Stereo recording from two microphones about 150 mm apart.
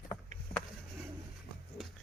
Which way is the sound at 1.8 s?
Centre (ahead or behind).